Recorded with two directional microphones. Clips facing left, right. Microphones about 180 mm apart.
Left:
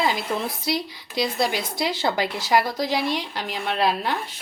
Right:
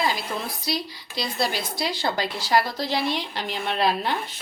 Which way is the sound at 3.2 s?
5° left (ahead or behind).